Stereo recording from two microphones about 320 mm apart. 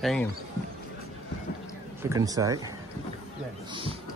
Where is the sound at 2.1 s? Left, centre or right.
Centre.